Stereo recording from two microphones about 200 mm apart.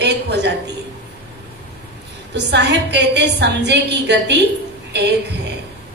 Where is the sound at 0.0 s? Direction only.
55° right (ahead or behind).